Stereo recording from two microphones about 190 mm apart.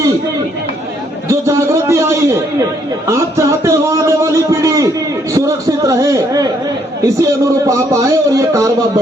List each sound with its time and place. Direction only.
1.3 s a man's voice: 15° right (ahead or behind)